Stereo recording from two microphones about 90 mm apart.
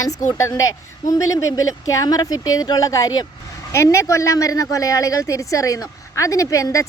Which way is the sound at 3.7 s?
30° left (ahead or behind).